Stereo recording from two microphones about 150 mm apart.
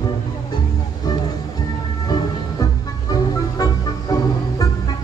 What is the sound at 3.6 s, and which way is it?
Music, 25° left (ahead or behind).